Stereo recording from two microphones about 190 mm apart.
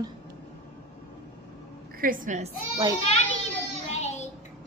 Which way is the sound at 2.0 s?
45° right (ahead or behind).